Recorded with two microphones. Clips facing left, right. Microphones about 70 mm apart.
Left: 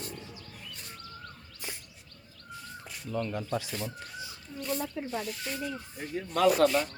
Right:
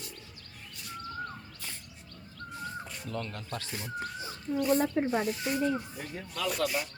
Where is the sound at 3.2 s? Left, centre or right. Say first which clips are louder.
Left 6 dB; centre.